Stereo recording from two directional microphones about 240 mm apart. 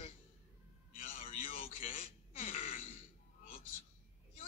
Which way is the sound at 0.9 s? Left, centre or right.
Left.